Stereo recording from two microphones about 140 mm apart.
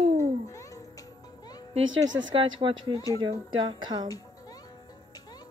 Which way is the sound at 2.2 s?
35° right (ahead or behind).